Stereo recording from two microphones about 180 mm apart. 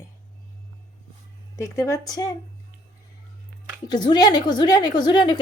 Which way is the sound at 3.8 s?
25° left (ahead or behind).